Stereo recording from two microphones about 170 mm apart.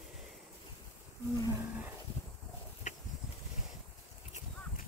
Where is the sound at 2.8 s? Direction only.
45° left (ahead or behind).